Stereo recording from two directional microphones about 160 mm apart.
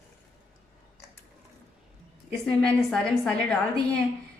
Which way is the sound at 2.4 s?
5° left (ahead or behind).